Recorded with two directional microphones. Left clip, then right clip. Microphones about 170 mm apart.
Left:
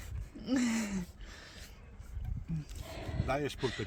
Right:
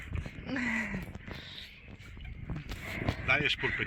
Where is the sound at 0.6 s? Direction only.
80° left.